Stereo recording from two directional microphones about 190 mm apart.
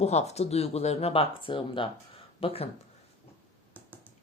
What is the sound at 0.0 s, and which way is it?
Speech, 35° left (ahead or behind).